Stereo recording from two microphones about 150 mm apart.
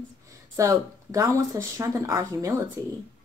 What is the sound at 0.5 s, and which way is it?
Speech, 20° right (ahead or behind).